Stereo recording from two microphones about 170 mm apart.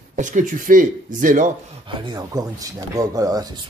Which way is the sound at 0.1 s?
50° right (ahead or behind).